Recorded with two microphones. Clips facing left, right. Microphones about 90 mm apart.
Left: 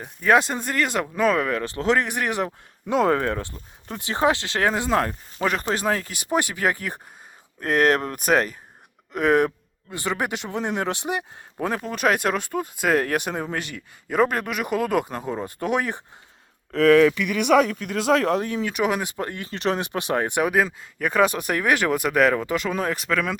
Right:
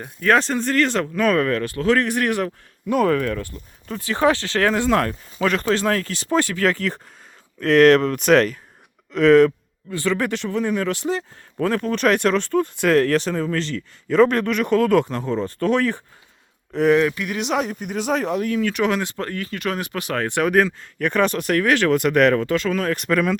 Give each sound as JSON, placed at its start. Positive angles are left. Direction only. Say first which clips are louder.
{"t": 0.0, "sound": "speech", "louder": "right 1 dB", "side_deg": 10}
{"t": 1.6, "sound": "speech", "louder": "right 3 dB", "side_deg": 25}
{"t": 17.4, "sound": "speech", "louder": "left 6 dB", "side_deg": 55}
{"t": 17.7, "sound": "speech", "louder": "left 2 dB", "side_deg": 90}
{"t": 18.3, "sound": "speech", "louder": "right 3 dB", "side_deg": 25}
{"t": 23.0, "sound": "speech", "louder": "right 5 dB", "side_deg": 0}